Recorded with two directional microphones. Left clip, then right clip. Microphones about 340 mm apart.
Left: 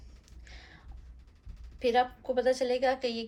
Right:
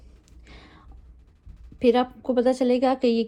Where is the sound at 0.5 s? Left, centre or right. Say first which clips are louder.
Right 3 dB; centre.